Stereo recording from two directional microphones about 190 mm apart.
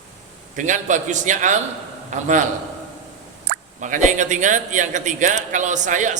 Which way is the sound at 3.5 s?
40° right (ahead or behind).